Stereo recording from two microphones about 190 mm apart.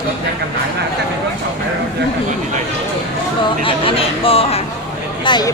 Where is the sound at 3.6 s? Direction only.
30° left (ahead or behind).